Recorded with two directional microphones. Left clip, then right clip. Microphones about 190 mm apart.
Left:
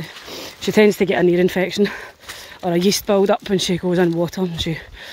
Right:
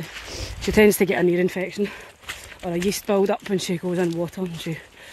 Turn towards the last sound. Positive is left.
turn(degrees=35)  # may be behind; listen again after turning